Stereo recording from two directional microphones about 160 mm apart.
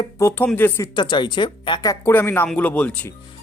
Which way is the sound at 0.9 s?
30° left (ahead or behind).